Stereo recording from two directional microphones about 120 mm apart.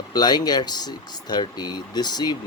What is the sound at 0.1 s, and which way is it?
Speech, 35° left (ahead or behind).